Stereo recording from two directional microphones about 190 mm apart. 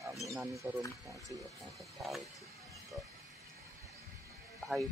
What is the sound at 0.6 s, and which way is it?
Speech, 5° right (ahead or behind).